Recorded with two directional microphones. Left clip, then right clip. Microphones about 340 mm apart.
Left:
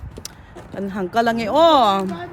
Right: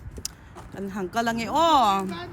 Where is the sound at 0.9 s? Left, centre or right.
Centre.